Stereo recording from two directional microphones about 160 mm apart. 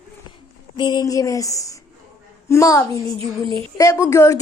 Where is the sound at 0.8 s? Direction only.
25° left (ahead or behind).